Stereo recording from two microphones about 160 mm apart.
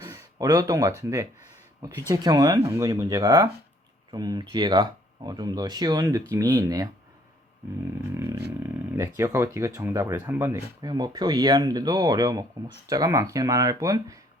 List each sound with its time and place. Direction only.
0.0 s speech: 20° right (ahead or behind)
8.1 s roaring cats: 15° right (ahead or behind)
8.9 s speech: 15° right (ahead or behind)